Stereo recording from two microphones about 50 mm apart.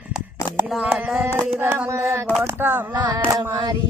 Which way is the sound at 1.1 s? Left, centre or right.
Right.